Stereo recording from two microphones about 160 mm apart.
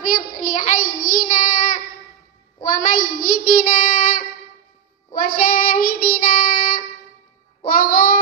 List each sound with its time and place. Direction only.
0.0 s child singing: 55° left (ahead or behind)